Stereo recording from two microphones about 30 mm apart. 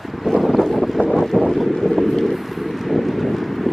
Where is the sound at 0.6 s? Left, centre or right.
Centre.